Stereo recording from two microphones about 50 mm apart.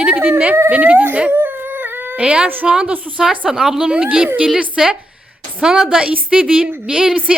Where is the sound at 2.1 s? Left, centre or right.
Centre.